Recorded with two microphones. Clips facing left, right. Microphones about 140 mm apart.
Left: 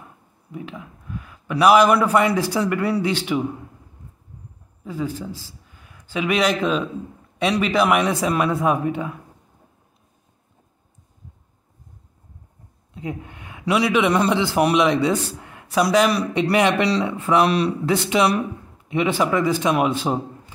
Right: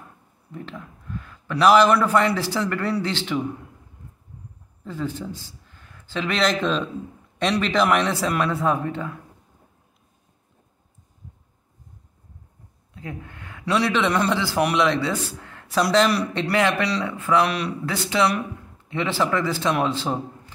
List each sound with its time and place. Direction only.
0.5 s a man's voice: 10° left (ahead or behind)
4.8 s a man's voice: 10° left (ahead or behind)
12.9 s a man's voice: 20° left (ahead or behind)